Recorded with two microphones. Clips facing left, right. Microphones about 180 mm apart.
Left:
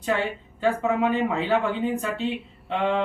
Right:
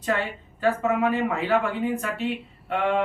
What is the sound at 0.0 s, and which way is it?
A woman's voice, 15° left (ahead or behind).